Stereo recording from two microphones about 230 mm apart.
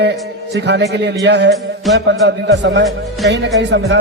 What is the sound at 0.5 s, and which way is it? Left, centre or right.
Speech, right.